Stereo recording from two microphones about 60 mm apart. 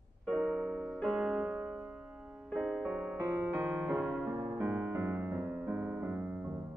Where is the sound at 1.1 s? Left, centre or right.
Centre.